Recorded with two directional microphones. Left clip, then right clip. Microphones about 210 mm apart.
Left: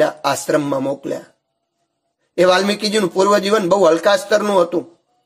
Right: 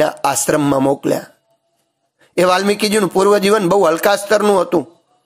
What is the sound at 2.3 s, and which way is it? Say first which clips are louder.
Speech: even; 25° right (ahead or behind).